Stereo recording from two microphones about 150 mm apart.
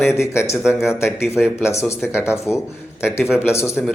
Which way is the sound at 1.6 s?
15° left (ahead or behind).